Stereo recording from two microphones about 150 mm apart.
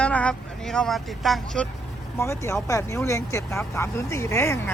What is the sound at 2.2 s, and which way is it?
Speech, 20° left (ahead or behind).